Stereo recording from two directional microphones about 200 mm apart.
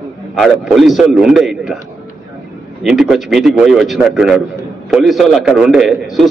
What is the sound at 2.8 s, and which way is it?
A man's voice, centre (ahead or behind).